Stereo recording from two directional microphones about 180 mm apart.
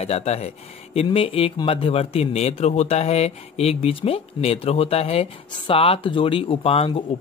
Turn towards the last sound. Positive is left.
turn(degrees=30)  # may be behind; listen again after turning